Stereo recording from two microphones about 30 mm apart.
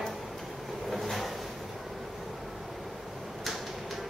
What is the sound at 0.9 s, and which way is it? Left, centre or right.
Vehicle, centre.